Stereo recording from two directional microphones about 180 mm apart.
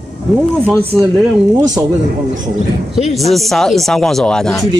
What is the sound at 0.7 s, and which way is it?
Speech, 10° right (ahead or behind).